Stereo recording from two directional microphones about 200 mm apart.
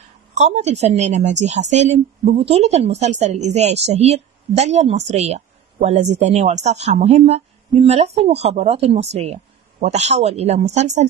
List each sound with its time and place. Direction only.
0.3 s a woman's voice: 35° right (ahead or behind)